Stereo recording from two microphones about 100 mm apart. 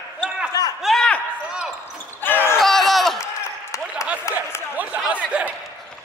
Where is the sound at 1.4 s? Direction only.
10° right (ahead or behind).